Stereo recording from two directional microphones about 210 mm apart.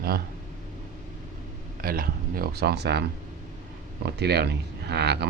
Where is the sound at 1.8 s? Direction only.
45° right (ahead or behind).